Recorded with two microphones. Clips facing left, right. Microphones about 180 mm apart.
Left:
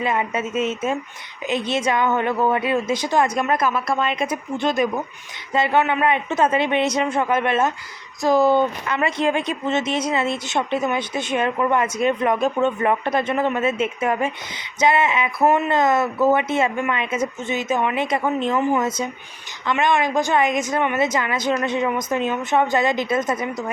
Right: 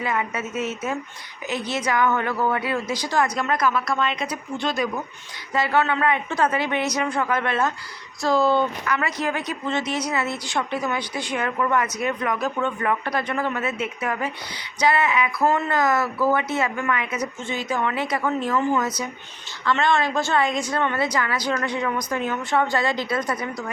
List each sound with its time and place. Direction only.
0.0 s speech: 25° left (ahead or behind)